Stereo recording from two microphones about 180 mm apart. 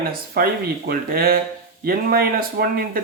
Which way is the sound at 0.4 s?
55° right (ahead or behind).